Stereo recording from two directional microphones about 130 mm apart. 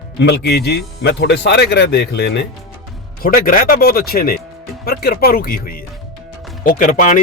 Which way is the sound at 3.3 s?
90° left.